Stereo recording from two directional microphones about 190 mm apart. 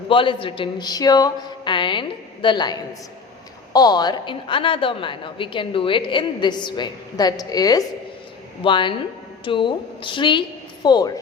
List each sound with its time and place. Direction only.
0.1 s a woman's voice: 25° left (ahead or behind)